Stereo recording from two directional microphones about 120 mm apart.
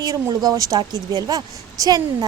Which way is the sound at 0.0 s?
30° right (ahead or behind).